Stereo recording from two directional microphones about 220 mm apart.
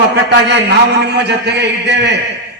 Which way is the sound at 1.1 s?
50° right (ahead or behind).